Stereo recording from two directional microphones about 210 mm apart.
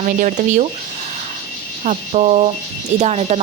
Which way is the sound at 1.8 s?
35° right (ahead or behind).